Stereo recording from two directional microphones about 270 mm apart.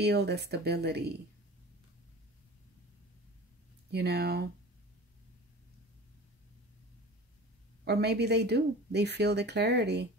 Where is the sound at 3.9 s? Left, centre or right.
Right.